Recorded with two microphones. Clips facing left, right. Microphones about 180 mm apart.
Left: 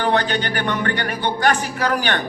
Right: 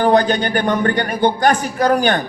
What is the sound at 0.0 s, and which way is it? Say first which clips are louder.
A man's voice: right 6 dB; 40° right (ahead or behind).